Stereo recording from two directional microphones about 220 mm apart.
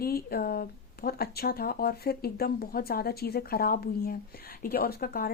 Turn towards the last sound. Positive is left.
turn(degrees=40)  # may be behind; listen again after turning